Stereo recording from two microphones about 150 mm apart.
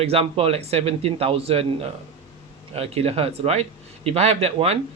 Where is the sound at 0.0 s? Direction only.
40° right (ahead or behind).